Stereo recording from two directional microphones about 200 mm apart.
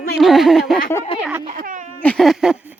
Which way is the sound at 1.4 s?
40° right (ahead or behind).